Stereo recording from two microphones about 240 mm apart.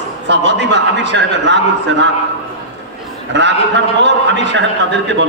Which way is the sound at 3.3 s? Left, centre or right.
Right.